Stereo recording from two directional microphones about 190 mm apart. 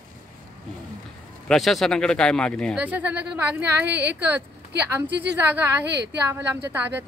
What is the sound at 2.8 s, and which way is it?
Speech, 10° right (ahead or behind).